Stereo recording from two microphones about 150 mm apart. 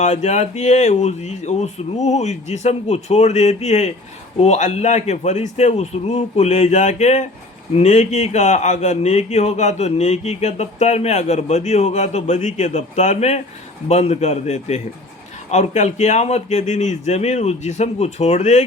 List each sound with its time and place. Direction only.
0.0 s speech: 50° left (ahead or behind)